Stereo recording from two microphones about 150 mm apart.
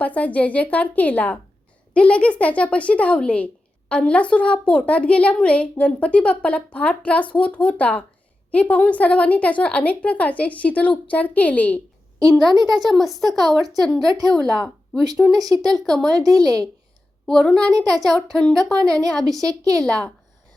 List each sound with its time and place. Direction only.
0.0 s speech: 10° left (ahead or behind)
12.2 s a woman's voice: 25° right (ahead or behind)
12.8 s a woman's voice: centre (ahead or behind)
14.1 s a woman's voice: 25° right (ahead or behind)
15.7 s a woman's voice: 5° left (ahead or behind)
16.1 s a woman's voice: 25° right (ahead or behind)
17.2 s a woman's voice: 5° left (ahead or behind)
17.7 s a woman's voice: 25° right (ahead or behind)
18.1 s a woman's voice: centre (ahead or behind)
18.8 s a woman's voice: 25° right (ahead or behind)